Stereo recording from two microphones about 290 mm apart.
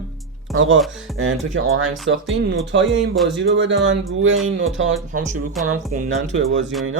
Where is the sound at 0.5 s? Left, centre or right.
Right.